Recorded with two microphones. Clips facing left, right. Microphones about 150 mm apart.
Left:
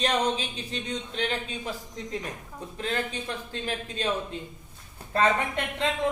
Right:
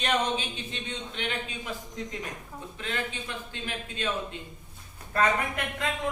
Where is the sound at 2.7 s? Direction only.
35° left (ahead or behind).